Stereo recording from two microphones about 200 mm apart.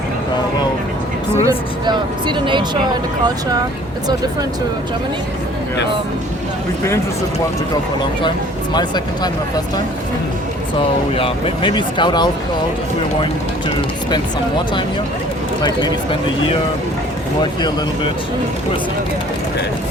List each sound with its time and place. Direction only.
1.5 s speech: 25° right (ahead or behind)
8.7 s speech: 20° left (ahead or behind)
10.8 s speech: 25° left (ahead or behind)